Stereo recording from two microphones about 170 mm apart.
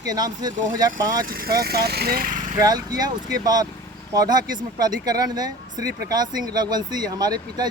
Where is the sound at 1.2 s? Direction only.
60° right (ahead or behind).